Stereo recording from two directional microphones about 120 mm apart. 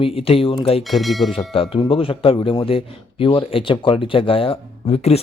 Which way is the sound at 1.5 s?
50° left (ahead or behind).